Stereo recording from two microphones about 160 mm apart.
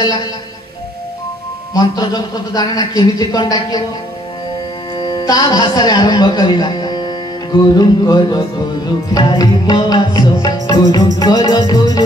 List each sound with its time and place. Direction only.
1.7 s a man's voice: 25° left (ahead or behind)
4.9 s a man's voice: 25° left (ahead or behind)
11.7 s music: 25° left (ahead or behind)